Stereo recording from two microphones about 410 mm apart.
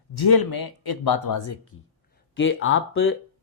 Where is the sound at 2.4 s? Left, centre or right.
Left.